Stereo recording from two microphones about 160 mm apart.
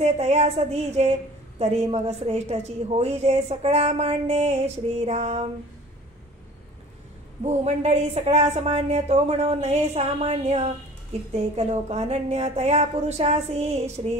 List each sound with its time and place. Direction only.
0.0 s a woman's voice: 40° right (ahead or behind)
7.4 s a woman's voice: 40° right (ahead or behind)